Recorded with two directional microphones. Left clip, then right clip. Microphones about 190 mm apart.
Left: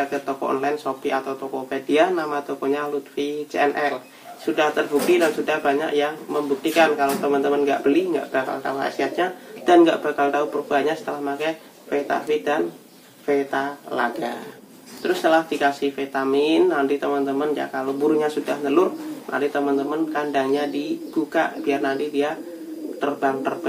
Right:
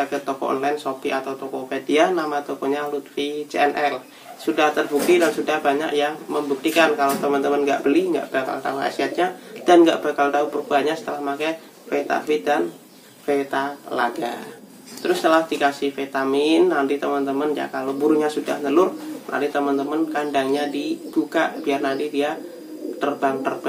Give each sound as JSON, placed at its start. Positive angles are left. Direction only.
{"t": 0.0, "sound": "a man's voice", "side_deg": -5}